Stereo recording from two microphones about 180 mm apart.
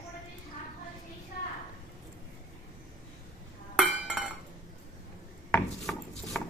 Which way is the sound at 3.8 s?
5° right (ahead or behind).